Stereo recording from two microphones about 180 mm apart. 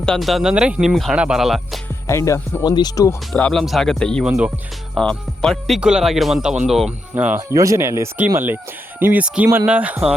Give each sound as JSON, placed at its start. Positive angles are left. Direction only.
{"t": 0.0, "sound": "speech", "side_deg": 0}
{"t": 2.0, "sound": "speech", "side_deg": 15}
{"t": 3.3, "sound": "speech", "side_deg": 5}